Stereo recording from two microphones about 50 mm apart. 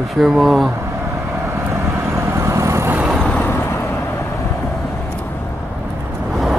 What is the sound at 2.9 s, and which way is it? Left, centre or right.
Vehicle, right.